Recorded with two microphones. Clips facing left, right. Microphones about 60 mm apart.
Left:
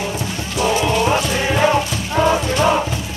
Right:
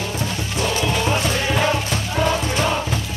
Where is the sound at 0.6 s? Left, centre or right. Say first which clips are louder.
Left 5 dB; centre.